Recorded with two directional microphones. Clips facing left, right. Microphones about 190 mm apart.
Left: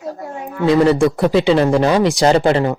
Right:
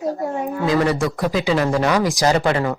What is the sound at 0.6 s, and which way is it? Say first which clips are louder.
Speech: left 7 dB; 30° left (ahead or behind).